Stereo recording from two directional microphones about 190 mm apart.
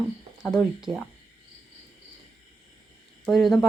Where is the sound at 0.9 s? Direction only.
25° right (ahead or behind).